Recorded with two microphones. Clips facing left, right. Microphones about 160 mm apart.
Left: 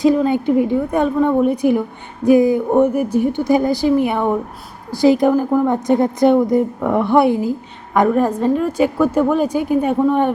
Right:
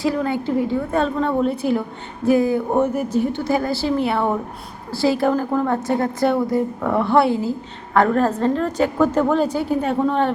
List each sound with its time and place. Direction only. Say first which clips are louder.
0.0 s a woman's voice: left 6 dB; 20° left (ahead or behind)